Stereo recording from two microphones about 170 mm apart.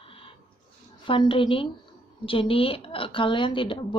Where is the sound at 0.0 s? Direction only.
30° left (ahead or behind).